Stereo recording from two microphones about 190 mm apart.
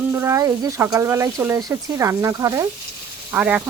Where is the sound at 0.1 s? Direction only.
15° right (ahead or behind).